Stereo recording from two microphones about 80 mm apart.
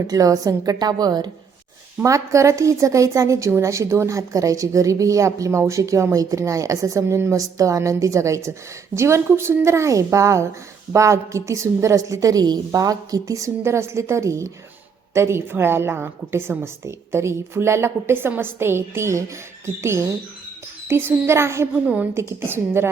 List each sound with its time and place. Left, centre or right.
0.1 s a woman's voice: right
2.0 s a woman's voice: right